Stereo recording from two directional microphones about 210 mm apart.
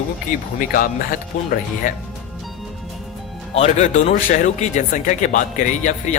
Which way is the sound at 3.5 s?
30° left (ahead or behind).